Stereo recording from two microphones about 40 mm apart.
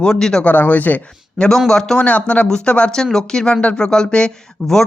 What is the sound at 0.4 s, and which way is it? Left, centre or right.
Speech, left.